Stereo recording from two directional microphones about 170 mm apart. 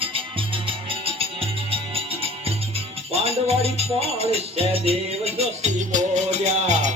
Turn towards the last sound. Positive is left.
turn(degrees=-45)  # may be behind; listen again after turning